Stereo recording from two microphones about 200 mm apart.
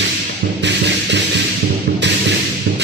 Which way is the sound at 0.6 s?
60° right (ahead or behind).